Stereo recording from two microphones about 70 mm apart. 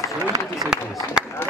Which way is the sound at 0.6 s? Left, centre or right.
Centre.